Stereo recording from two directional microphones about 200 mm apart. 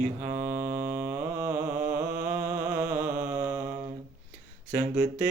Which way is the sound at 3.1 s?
40° right (ahead or behind).